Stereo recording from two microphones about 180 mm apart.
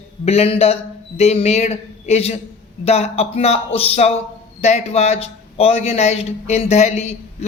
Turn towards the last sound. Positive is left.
turn(degrees=35)  # may be behind; listen again after turning